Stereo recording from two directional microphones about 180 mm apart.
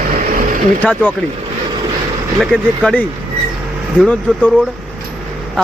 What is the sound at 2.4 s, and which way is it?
A man's voice, 5° left (ahead or behind).